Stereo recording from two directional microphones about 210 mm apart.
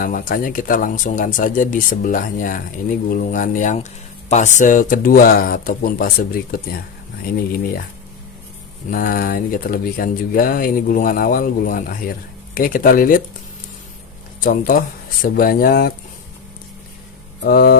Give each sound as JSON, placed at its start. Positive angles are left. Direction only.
{"t": 0.0, "sound": "speech", "side_deg": 40}
{"t": 8.9, "sound": "speech", "side_deg": 45}
{"t": 14.4, "sound": "speech", "side_deg": 45}
{"t": 17.4, "sound": "speech", "side_deg": 45}